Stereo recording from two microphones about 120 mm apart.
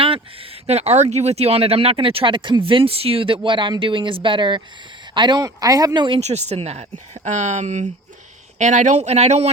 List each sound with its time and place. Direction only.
0.0 s speech: 50° right (ahead or behind)
6.1 s speech: 65° right (ahead or behind)
8.5 s speech: 90° right; by 9.5 s 65° right (ahead or behind)